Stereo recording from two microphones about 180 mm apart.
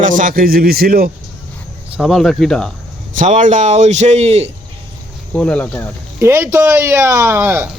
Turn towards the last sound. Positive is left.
turn(degrees=-10)  # may be behind; listen again after turning